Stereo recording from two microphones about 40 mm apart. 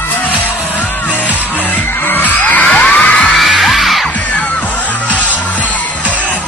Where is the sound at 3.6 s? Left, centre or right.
Centre.